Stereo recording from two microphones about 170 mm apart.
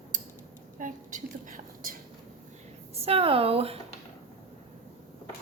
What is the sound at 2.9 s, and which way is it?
Speech, 35° right (ahead or behind).